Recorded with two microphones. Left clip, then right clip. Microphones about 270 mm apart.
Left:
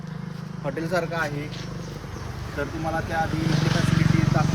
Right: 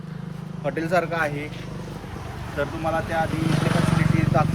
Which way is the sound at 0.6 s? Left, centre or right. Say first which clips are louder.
Right 4 dB; centre.